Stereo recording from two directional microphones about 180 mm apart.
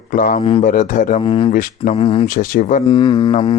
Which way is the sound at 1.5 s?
50° left (ahead or behind).